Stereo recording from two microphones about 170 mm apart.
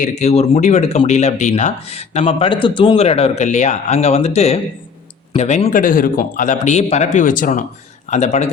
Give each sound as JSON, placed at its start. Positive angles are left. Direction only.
{"t": 0.0, "sound": "a man's voice", "side_deg": 40}